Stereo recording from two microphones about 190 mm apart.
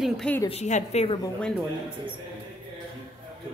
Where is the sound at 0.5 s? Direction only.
35° left (ahead or behind).